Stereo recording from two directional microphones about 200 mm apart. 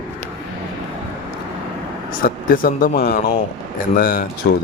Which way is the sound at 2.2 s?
45° left (ahead or behind).